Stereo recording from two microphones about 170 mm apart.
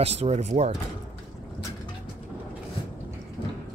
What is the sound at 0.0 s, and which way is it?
Speech, 40° right (ahead or behind).